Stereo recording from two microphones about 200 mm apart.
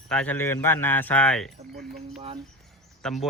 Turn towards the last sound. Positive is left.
turn(degrees=0)  # may be behind; listen again after turning